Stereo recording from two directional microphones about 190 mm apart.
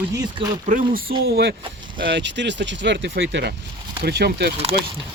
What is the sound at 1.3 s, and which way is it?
Speech, 55° right (ahead or behind).